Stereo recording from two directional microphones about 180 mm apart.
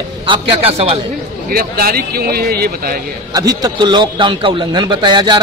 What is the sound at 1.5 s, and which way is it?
A man's voice, 55° right (ahead or behind).